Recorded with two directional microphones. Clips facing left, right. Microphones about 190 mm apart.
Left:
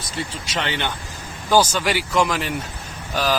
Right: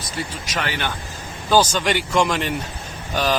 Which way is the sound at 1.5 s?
10° left (ahead or behind).